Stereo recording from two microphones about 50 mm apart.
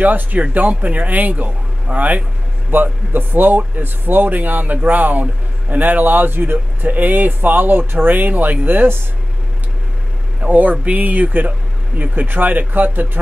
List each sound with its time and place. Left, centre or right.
0.0 s speech: right
10.5 s speech: right